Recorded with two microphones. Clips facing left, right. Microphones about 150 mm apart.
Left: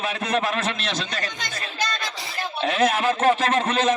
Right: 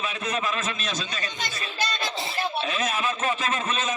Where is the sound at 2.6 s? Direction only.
70° left (ahead or behind).